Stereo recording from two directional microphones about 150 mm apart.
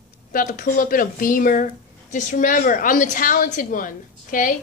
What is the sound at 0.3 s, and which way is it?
A woman's voice, 65° left (ahead or behind).